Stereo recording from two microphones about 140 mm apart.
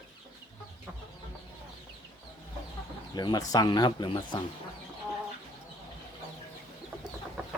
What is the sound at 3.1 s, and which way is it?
Speech, 30° left (ahead or behind).